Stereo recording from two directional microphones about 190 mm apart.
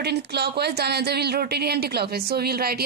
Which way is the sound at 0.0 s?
60° right (ahead or behind).